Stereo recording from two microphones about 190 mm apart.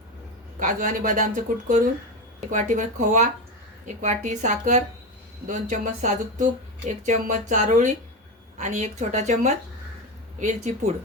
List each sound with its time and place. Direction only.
0.6 s speech: 45° right (ahead or behind)